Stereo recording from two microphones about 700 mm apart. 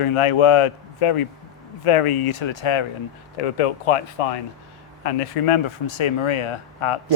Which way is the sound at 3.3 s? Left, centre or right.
Left.